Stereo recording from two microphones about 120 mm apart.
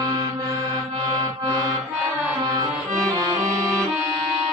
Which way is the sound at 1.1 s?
30° right (ahead or behind).